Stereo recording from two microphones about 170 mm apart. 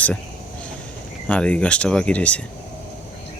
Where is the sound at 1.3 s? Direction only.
10° left (ahead or behind).